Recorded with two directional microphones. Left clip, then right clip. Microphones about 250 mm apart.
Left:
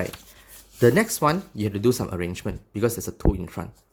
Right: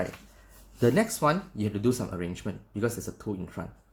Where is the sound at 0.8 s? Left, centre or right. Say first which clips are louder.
Left 5 dB; left.